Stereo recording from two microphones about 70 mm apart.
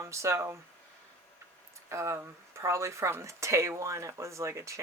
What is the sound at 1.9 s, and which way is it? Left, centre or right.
Speech, right.